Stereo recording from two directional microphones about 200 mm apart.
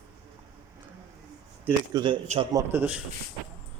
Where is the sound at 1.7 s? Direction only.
20° right (ahead or behind).